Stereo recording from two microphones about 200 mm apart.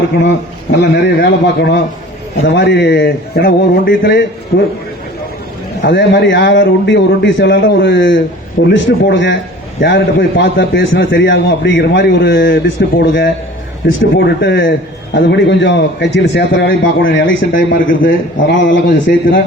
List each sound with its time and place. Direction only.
0.8 s a man's voice: 60° left (ahead or behind)
5.8 s a man's voice: 60° left (ahead or behind)
18.0 s a man's voice: 60° left (ahead or behind)